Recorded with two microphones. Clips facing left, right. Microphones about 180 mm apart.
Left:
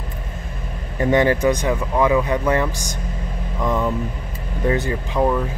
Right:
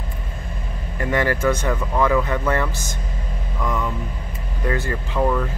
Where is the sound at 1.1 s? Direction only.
20° left (ahead or behind).